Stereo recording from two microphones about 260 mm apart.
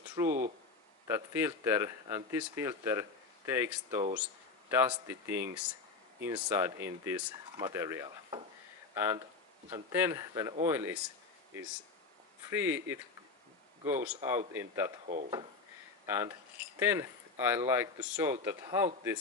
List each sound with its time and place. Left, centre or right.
0.2 s speech: centre
12.4 s speech: centre
15.0 s speech: right
16.1 s speech: centre